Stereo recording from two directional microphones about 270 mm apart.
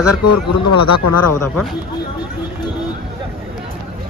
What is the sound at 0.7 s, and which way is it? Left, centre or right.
Speech, left.